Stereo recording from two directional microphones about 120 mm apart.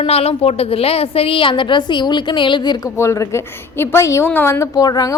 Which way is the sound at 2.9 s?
25° left (ahead or behind).